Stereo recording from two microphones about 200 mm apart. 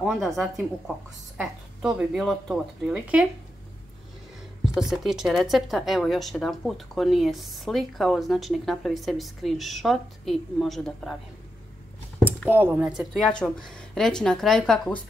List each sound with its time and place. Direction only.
0.0 s a woman's voice: centre (ahead or behind)
4.7 s a woman's voice: centre (ahead or behind)
12.3 s a woman's voice: 10° right (ahead or behind)